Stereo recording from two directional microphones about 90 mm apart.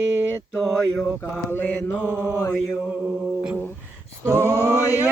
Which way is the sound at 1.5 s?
20° left (ahead or behind).